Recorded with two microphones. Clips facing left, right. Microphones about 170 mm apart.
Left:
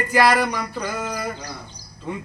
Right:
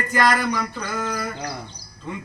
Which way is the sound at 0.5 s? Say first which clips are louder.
Even; 10° left (ahead or behind).